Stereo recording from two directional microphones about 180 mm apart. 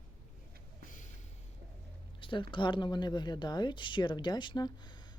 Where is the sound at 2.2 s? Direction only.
25° left (ahead or behind).